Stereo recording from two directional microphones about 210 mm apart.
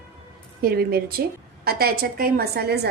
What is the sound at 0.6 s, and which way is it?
A woman's voice, 45° right (ahead or behind).